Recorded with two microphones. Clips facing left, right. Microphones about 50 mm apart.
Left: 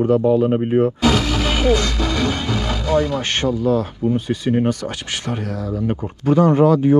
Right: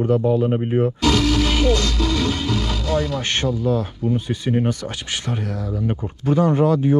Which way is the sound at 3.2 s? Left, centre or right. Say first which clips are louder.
Left 2 dB; left.